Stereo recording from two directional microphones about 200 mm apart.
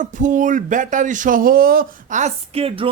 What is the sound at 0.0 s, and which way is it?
Speech, 40° right (ahead or behind).